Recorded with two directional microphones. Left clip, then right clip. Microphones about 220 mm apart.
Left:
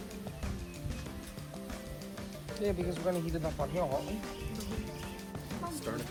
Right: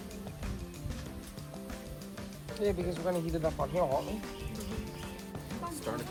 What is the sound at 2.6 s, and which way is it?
Speech, 45° right (ahead or behind).